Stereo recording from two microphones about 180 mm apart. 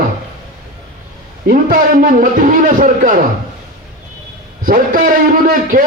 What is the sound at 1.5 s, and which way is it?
A man's voice, 50° right (ahead or behind).